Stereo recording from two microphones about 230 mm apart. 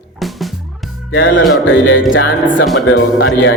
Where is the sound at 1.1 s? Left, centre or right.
Left.